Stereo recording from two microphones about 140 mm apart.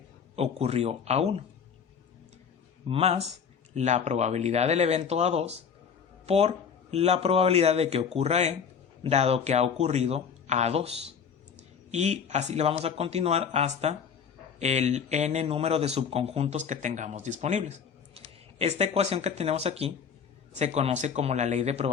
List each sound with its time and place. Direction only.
0.3 s a man's voice: 50° right (ahead or behind)
2.9 s a man's voice: 50° right (ahead or behind)